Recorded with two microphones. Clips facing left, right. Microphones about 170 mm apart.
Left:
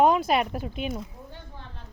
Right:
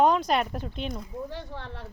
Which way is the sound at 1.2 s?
80° right.